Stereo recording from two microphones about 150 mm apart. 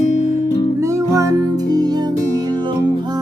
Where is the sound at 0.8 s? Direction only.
20° right (ahead or behind).